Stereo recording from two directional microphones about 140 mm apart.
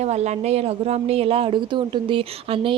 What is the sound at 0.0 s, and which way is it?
A woman's voice, 50° right (ahead or behind).